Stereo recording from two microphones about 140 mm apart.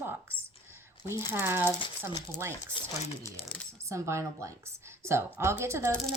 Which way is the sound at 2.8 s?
35° left (ahead or behind).